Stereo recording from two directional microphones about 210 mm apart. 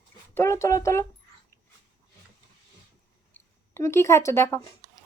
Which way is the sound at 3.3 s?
10° left (ahead or behind).